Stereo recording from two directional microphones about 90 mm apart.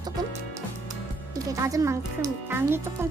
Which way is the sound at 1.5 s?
40° right (ahead or behind).